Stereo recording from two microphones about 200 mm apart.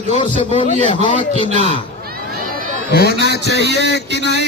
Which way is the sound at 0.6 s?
40° left (ahead or behind).